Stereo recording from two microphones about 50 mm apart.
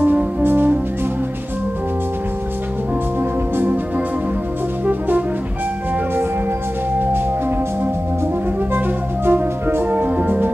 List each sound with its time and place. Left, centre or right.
0.4 s music: right
8.7 s music: right
9.8 s organ: right